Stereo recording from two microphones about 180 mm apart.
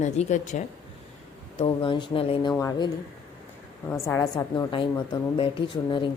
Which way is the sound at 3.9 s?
10° left (ahead or behind).